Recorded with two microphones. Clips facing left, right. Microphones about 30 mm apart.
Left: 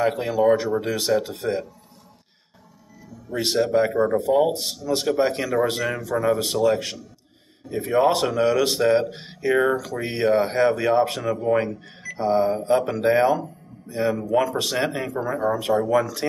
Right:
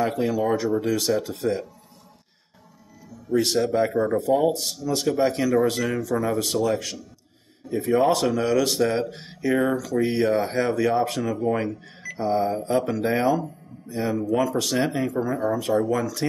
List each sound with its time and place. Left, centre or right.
0.0 s speech: left
3.3 s speech: left
3.5 s speech: centre
7.7 s speech: left
8.0 s speech: left